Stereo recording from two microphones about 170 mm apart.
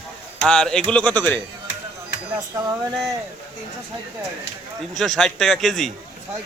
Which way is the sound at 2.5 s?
20° right (ahead or behind).